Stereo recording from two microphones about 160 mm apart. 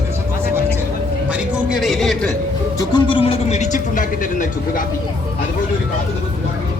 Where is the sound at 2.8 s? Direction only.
30° left (ahead or behind); by 4.8 s 55° left (ahead or behind).